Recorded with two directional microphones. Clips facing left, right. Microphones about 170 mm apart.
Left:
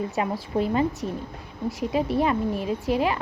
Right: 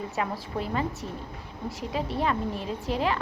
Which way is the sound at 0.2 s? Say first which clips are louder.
Left 5 dB; 20° left (ahead or behind).